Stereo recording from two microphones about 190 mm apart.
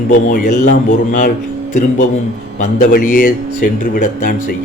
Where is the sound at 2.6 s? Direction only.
45° left (ahead or behind).